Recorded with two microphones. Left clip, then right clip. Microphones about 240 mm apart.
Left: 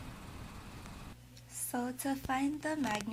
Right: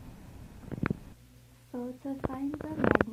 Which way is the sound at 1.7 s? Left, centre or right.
Left.